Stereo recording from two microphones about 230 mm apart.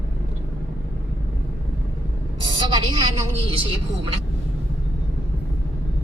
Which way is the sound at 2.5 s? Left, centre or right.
Right.